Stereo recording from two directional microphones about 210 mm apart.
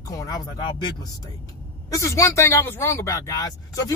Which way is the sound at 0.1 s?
15° left (ahead or behind).